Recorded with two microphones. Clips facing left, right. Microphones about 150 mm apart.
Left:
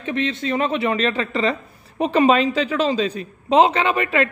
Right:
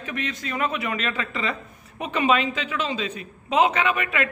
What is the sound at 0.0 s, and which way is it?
A man's voice, 25° left (ahead or behind).